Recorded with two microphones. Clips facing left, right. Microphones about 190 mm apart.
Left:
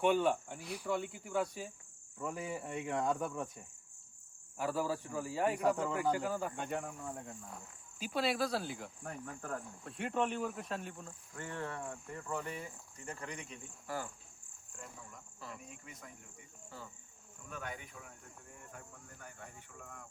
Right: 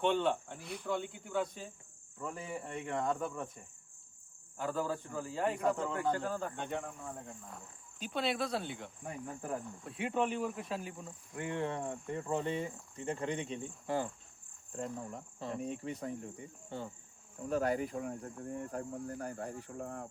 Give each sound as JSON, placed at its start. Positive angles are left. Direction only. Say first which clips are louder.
{"t": 0.0, "sound": "cricket", "louder": "left 1 dB", "side_deg": 5}
{"t": 4.5, "sound": "a man's voice", "louder": "even", "side_deg": 5}
{"t": 5.7, "sound": "cricket", "louder": "even", "side_deg": 5}
{"t": 9.4, "sound": "insect", "louder": "right 3 dB", "side_deg": -15}
{"t": 9.6, "sound": "cricket", "louder": "right 2 dB", "side_deg": 0}
{"t": 11.3, "sound": "speech", "louder": "right 6 dB", "side_deg": -20}